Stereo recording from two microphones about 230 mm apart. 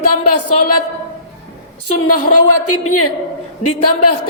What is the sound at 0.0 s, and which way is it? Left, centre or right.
Speech, left.